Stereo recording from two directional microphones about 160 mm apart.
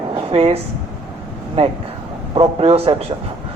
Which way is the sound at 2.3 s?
35° right (ahead or behind).